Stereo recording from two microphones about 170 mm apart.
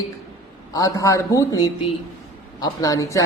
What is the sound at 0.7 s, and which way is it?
A man's voice, 20° left (ahead or behind).